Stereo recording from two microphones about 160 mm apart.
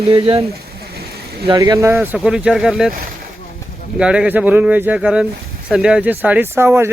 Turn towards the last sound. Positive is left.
turn(degrees=-15)  # may be behind; listen again after turning